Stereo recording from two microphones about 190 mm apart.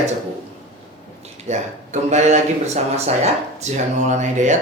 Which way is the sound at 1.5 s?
35° right (ahead or behind).